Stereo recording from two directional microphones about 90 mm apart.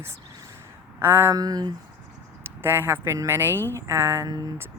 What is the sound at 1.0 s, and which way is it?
Speech, 25° right (ahead or behind).